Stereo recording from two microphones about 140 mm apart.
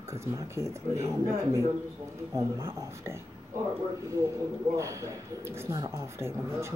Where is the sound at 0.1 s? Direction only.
20° right (ahead or behind).